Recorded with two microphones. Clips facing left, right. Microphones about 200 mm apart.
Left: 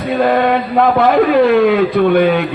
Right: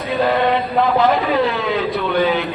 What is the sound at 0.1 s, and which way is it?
A man's voice, 50° left (ahead or behind).